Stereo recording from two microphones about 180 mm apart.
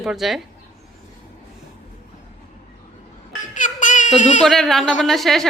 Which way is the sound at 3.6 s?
45° left (ahead or behind).